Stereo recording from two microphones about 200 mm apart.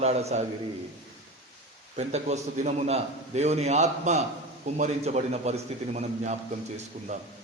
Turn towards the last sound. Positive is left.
turn(degrees=-35)  # may be behind; listen again after turning